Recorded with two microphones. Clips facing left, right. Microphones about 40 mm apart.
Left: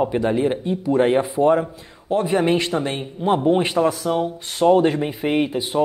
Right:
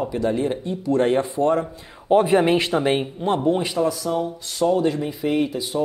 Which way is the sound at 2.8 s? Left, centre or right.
Centre.